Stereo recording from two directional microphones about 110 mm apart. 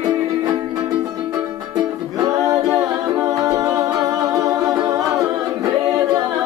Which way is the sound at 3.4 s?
35° right (ahead or behind).